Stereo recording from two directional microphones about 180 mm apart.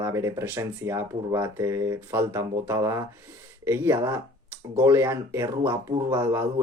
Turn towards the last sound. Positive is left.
turn(degrees=-10)  # may be behind; listen again after turning